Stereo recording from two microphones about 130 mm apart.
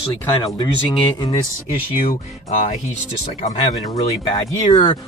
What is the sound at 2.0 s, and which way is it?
Speech, 75° left (ahead or behind).